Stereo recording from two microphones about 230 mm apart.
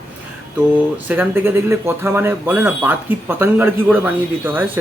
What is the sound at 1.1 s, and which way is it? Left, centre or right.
Speech, centre.